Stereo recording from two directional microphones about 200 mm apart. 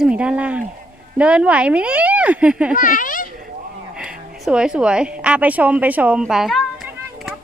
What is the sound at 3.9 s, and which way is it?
A woman's voice, 5° right (ahead or behind).